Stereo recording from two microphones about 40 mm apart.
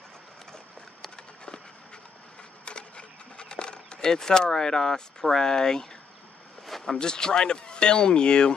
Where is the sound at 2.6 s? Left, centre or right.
Left; by 6.9 s centre.